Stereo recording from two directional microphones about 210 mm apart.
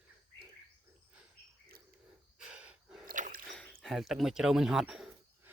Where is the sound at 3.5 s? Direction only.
Centre (ahead or behind).